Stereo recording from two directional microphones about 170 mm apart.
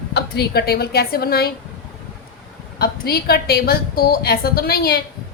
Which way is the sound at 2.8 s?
65° left (ahead or behind).